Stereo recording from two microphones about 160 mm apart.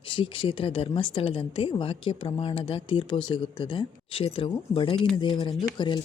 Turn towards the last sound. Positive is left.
turn(degrees=30)  # may be behind; listen again after turning